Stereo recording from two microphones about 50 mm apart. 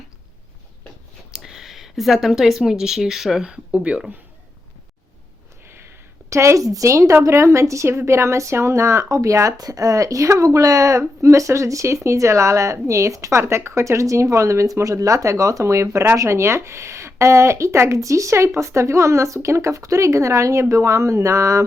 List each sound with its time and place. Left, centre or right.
1.3 s speech: centre
3.4 s speech: centre
6.3 s a woman's voice: right